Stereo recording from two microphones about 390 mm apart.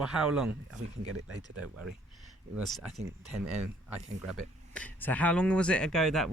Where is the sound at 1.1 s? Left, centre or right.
Right.